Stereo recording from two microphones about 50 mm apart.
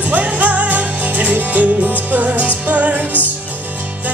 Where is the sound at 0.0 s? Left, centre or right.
Right.